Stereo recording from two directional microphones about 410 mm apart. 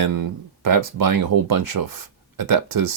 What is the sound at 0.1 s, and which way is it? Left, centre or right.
Speech, right.